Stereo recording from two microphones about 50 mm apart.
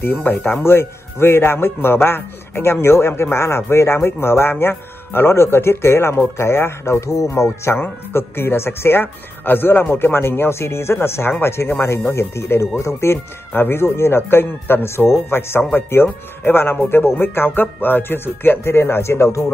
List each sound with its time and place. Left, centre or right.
0.1 s speech: left
0.7 s a man's voice: left
7.7 s a man's voice: left
13.5 s speech: left